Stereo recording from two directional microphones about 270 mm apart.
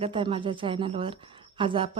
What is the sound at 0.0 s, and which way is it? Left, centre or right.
A woman's voice, centre.